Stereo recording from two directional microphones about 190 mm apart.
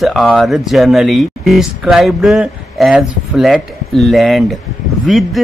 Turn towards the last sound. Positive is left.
turn(degrees=0)  # may be behind; listen again after turning